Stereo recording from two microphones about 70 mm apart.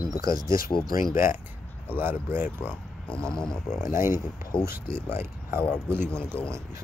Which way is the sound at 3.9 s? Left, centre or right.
Right.